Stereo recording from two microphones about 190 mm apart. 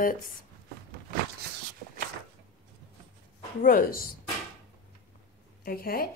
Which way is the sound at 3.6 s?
50° left (ahead or behind).